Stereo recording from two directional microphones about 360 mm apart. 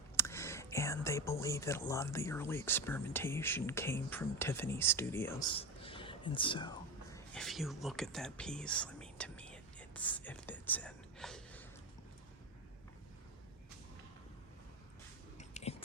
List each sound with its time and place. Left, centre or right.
0.2 s speech: centre
7.3 s whispering: centre
15.4 s whispering: centre